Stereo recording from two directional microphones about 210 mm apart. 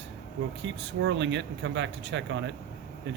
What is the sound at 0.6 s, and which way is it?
Speech, 60° right (ahead or behind).